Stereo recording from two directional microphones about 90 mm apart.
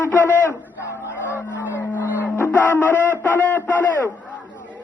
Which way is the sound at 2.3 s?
25° left (ahead or behind).